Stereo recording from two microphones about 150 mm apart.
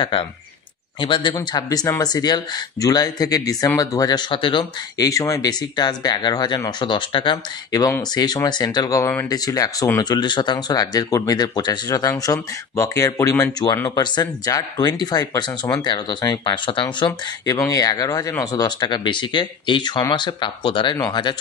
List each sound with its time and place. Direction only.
0.0 s speech: 35° left (ahead or behind)